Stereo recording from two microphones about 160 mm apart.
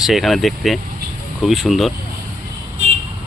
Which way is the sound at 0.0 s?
Centre (ahead or behind).